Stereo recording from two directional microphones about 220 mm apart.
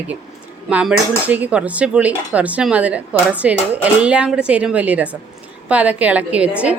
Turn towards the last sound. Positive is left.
turn(degrees=-5)  # may be behind; listen again after turning